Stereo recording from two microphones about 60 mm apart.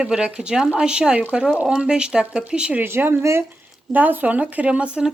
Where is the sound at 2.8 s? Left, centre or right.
Right.